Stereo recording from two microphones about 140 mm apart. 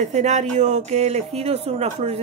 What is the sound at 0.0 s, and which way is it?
A woman's voice, 55° right (ahead or behind).